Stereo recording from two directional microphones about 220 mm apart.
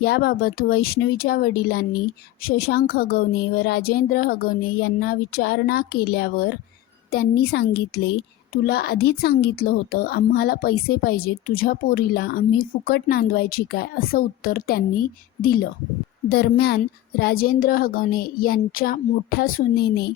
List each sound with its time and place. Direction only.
0.0 s a woman's voice: 45° left (ahead or behind)